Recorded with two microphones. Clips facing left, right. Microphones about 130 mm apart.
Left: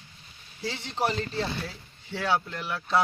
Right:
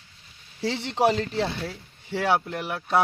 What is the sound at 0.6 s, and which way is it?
Speech, 75° right (ahead or behind).